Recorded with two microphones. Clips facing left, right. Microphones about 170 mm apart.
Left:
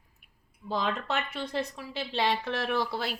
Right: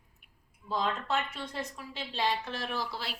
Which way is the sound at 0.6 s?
70° left (ahead or behind).